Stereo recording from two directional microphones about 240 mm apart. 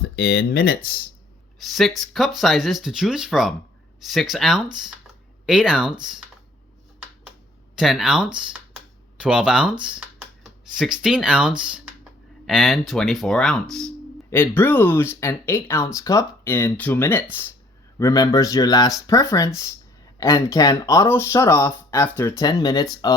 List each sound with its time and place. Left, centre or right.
0.2 s speech: left
1.5 s speech: centre
7.8 s speech: centre